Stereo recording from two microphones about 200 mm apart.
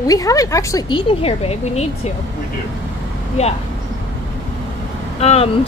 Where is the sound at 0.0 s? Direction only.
15° left (ahead or behind).